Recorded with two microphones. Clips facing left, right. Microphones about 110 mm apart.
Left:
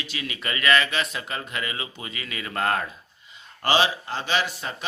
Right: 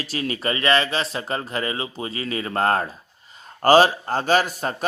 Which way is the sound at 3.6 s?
45° right (ahead or behind).